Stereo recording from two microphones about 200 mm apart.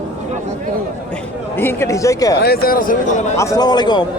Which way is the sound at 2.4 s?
50° left (ahead or behind).